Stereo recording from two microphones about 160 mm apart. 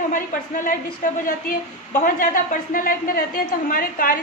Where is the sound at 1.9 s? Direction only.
60° left (ahead or behind).